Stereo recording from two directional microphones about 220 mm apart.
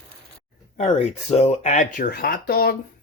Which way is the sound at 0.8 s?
30° left (ahead or behind).